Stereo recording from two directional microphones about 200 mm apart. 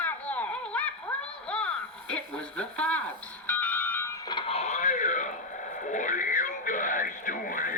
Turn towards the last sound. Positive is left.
turn(degrees=40)  # may be behind; listen again after turning